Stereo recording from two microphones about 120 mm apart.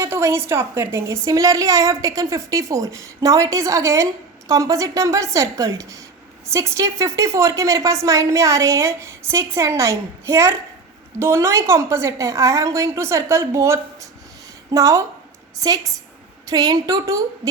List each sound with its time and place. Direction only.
0.0 s a woman's voice: 20° right (ahead or behind)